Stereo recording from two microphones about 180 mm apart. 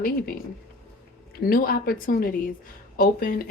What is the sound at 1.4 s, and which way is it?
Speech, 55° left (ahead or behind).